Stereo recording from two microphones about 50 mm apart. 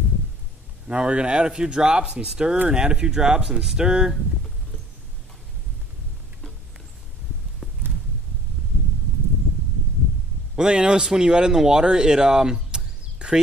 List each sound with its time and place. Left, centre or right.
0.8 s speech: right
7.6 s clip-clop: centre
10.5 s a man's voice: centre